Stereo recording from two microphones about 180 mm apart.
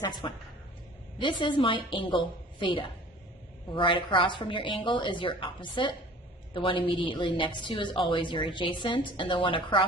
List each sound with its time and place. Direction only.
0.0 s a woman's voice: 25° left (ahead or behind)